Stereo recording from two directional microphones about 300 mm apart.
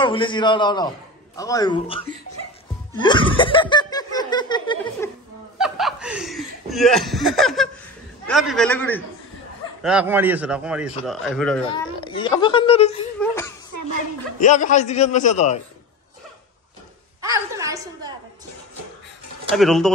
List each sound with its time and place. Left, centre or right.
0.0 s laughter: centre
5.6 s speech: centre
11.7 s laughter: centre
13.2 s laughter: centre
14.4 s a man's voice: left
17.2 s a sound: centre
19.5 s speech: centre